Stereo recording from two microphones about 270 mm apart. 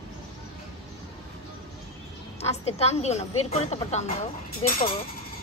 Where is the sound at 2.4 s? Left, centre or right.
Left.